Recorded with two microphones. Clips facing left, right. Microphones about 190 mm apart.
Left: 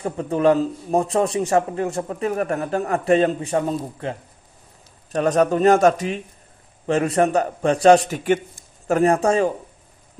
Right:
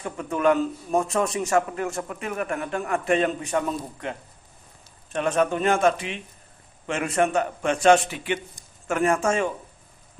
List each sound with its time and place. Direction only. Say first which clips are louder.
0.0 s a man's voice: left 4 dB; 35° left (ahead or behind)